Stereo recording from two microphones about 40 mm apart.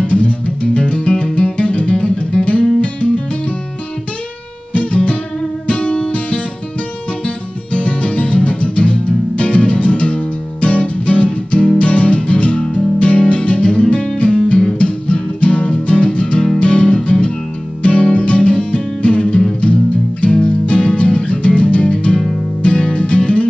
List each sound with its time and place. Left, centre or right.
0.0 s music: left
4.7 s music: left